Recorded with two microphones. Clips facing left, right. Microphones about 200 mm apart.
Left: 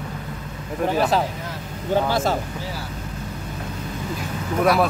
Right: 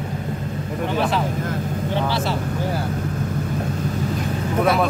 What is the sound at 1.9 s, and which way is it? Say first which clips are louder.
Speech: left 4 dB; 45° left (ahead or behind).